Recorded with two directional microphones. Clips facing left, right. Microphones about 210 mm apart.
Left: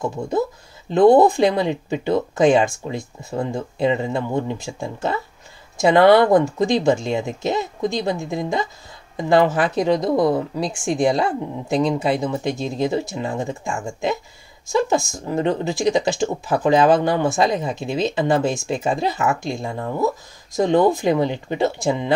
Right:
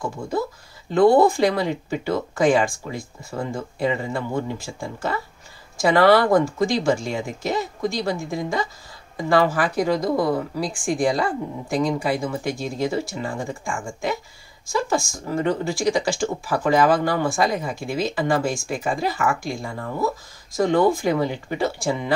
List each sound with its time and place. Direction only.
0.9 s speech: 20° left (ahead or behind)